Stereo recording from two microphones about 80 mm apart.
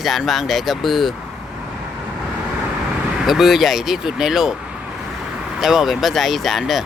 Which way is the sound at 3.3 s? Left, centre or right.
Centre.